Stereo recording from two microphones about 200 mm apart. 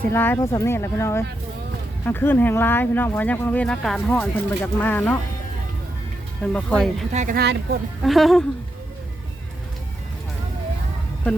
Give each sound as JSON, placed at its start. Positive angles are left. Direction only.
{"t": 0.1, "sound": "speech", "side_deg": 10}
{"t": 6.4, "sound": "speech", "side_deg": 5}
{"t": 7.1, "sound": "speech", "side_deg": -35}
{"t": 7.3, "sound": "speech", "side_deg": -55}
{"t": 8.0, "sound": "speech", "side_deg": 0}